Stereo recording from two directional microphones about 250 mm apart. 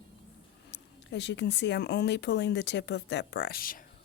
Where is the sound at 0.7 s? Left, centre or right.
Left.